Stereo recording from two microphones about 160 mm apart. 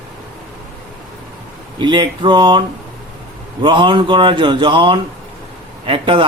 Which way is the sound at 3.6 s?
30° right (ahead or behind).